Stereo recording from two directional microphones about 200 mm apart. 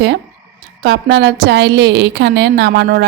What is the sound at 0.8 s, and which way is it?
A woman's voice, 60° right (ahead or behind).